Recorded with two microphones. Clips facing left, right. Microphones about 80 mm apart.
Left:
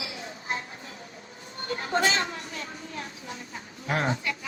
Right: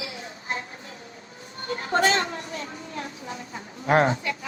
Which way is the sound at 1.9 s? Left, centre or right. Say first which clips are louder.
Right 4 dB; right.